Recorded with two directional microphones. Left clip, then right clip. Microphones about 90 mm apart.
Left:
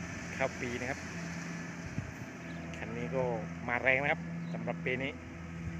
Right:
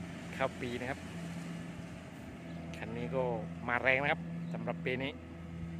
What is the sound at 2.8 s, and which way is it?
Speech, 10° right (ahead or behind).